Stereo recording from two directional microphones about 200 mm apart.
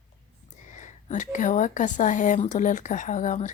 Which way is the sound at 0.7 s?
40° left (ahead or behind).